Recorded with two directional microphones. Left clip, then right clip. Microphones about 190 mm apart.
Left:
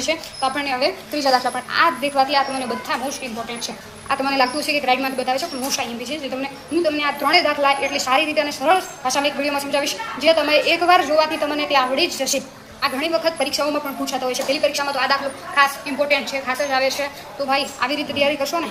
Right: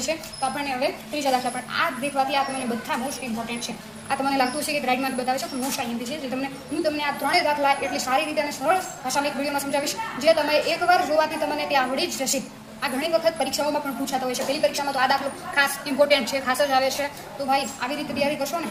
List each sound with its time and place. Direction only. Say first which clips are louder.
0.0 s a woman's voice: left 5 dB; 10° left (ahead or behind)
4.1 s a woman's voice: left 4 dB; centre (ahead or behind)
16.0 s a woman's voice: right 1 dB; 25° right (ahead or behind)
17.5 s a woman's voice: left 3 dB; 5° left (ahead or behind)